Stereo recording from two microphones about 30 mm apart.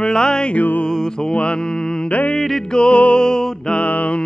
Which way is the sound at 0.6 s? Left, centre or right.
Left.